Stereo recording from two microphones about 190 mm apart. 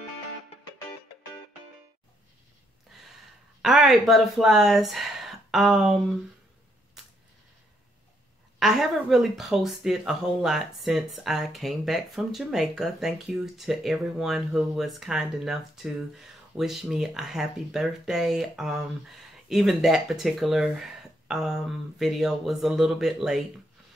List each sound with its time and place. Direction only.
2.9 s a sound: centre (ahead or behind)
3.6 s speech: centre (ahead or behind)
8.5 s speech: centre (ahead or behind)